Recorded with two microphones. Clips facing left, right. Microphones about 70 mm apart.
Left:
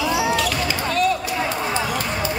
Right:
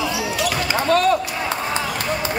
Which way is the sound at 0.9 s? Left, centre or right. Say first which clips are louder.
Right 4 dB; right.